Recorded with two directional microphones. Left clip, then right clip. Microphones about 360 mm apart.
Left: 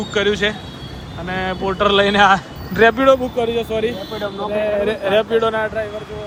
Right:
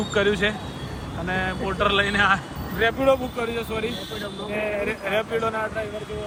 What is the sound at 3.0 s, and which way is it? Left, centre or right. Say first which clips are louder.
Speech: left 7 dB; left.